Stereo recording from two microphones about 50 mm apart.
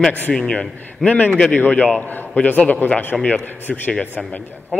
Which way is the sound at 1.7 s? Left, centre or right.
Left.